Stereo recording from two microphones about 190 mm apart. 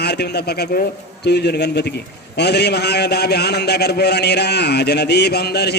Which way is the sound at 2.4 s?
60° left (ahead or behind).